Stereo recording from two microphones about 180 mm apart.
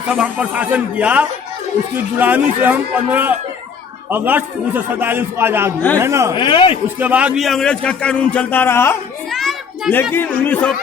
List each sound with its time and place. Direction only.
0.1 s a man's voice: 5° right (ahead or behind)
6.3 s speech: 25° left (ahead or behind)
7.0 s a man's voice: 10° right (ahead or behind); by 9.0 s 15° left (ahead or behind)
9.3 s a sound: centre (ahead or behind)
9.9 s speech: 10° left (ahead or behind)